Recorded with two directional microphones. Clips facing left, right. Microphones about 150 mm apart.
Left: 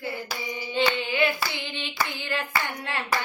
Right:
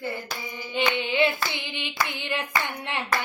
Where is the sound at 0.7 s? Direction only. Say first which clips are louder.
Right 1 dB; 15° right (ahead or behind).